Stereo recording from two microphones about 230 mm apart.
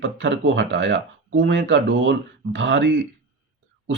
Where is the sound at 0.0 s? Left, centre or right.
Right.